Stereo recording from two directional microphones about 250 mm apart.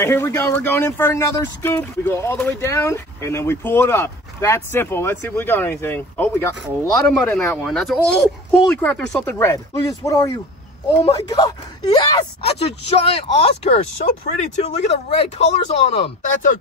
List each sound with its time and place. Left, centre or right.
0.0 s speech: centre